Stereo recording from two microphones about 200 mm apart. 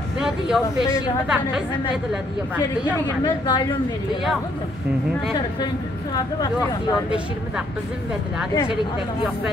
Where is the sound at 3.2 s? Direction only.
25° left (ahead or behind).